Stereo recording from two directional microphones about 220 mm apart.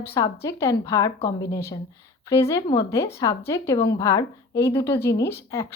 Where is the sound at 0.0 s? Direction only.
10° left (ahead or behind).